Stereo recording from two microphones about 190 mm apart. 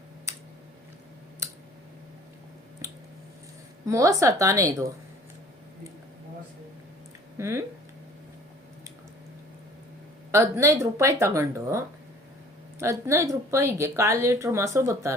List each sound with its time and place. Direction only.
2.8 s a sound: 15° right (ahead or behind)
3.8 s speech: 15° right (ahead or behind)
7.3 s speech: 15° right (ahead or behind)
10.3 s speech: 15° right (ahead or behind)
12.8 s speech: 15° right (ahead or behind)